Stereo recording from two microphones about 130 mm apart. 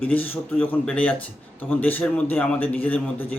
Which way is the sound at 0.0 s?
10° left (ahead or behind).